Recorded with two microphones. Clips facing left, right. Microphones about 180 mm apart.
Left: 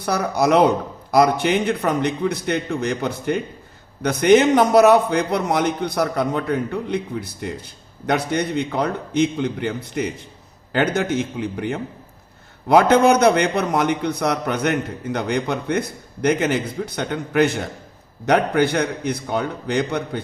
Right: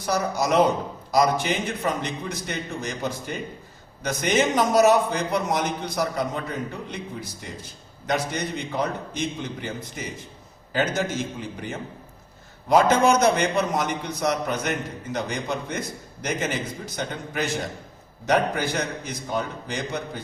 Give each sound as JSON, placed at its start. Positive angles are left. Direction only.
{"t": 0.0, "sound": "a man's voice", "side_deg": 60}